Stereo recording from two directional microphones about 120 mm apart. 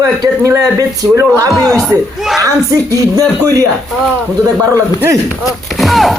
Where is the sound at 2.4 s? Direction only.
25° right (ahead or behind).